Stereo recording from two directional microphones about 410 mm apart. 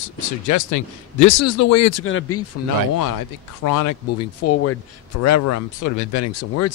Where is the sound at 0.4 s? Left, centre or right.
Left.